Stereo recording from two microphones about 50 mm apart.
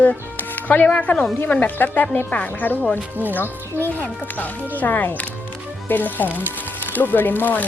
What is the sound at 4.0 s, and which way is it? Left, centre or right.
Speech, left.